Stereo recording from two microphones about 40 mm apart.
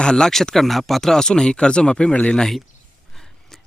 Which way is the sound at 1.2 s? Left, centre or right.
Centre.